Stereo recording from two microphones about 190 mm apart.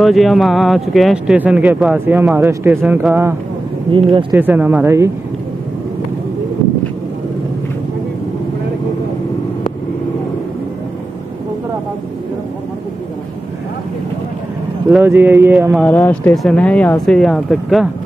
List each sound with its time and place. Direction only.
0.0 s speech: centre (ahead or behind)
3.9 s speech: 25° right (ahead or behind)
4.3 s speech: 10° right (ahead or behind)
14.9 s speech: 10° right (ahead or behind)
15.8 s speech: 5° left (ahead or behind)